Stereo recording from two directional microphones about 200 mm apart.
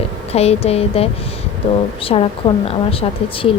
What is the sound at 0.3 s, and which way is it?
Speech, 30° left (ahead or behind).